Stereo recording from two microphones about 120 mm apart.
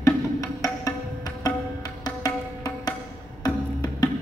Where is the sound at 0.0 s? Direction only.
25° left (ahead or behind).